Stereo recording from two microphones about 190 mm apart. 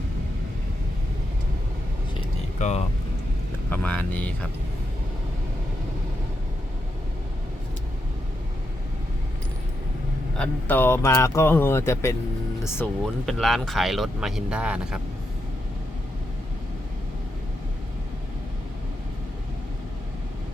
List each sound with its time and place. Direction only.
2.6 s speech: 35° left (ahead or behind)
3.7 s speech: 10° left (ahead or behind)
10.3 s speech: 5° left (ahead or behind)
13.2 s speech: centre (ahead or behind)